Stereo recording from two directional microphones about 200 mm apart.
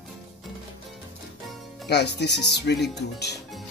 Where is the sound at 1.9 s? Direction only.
55° left (ahead or behind).